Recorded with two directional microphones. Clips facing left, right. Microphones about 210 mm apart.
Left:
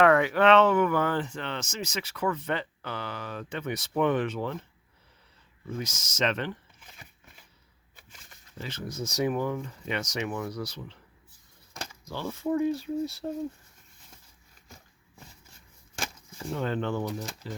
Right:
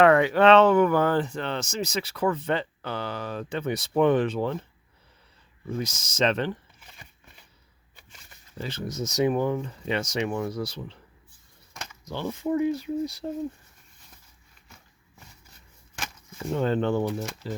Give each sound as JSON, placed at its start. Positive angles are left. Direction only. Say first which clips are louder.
{"t": 0.0, "sound": "speech", "louder": "right 3 dB", "side_deg": -25}
{"t": 5.6, "sound": "speech", "louder": "right 4 dB", "side_deg": -30}
{"t": 6.7, "sound": "a sound", "louder": "right 1 dB", "side_deg": 0}
{"t": 8.5, "sound": "speech", "louder": "right 4 dB", "side_deg": -35}
{"t": 8.9, "sound": "speech", "louder": "right 4 dB", "side_deg": -20}
{"t": 11.7, "sound": "a sound", "louder": "left 2 dB", "side_deg": 35}
{"t": 12.0, "sound": "speech", "louder": "right 2 dB", "side_deg": -20}
{"t": 16.5, "sound": "speech", "louder": "right 5 dB", "side_deg": -35}